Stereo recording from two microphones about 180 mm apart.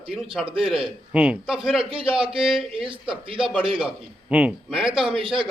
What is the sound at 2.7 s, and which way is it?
Speech, 30° right (ahead or behind).